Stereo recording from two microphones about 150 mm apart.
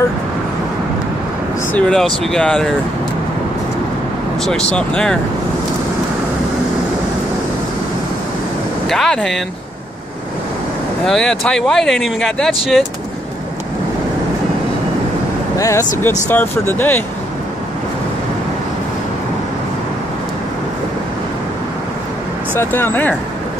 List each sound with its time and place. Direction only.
1.7 s speech: 5° left (ahead or behind)
4.5 s speech: 5° left (ahead or behind)
8.8 s speech: centre (ahead or behind)
11.1 s speech: 5° left (ahead or behind)
15.5 s speech: 20° left (ahead or behind)
22.6 s speech: 15° left (ahead or behind)